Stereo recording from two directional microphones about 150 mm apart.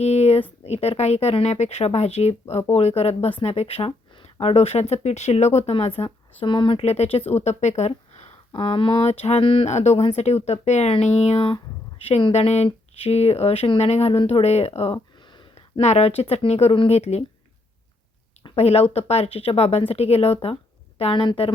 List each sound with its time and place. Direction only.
0.0 s a sound: 45° left (ahead or behind)
0.6 s speech: 45° left (ahead or behind)
8.5 s speech: 35° left (ahead or behind)
14.9 s a sound: 30° left (ahead or behind)
15.8 s speech: 45° left (ahead or behind)
18.4 s a woman's voice: 40° left (ahead or behind)